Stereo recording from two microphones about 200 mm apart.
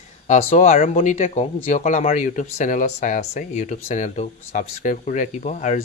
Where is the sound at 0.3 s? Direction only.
35° left (ahead or behind).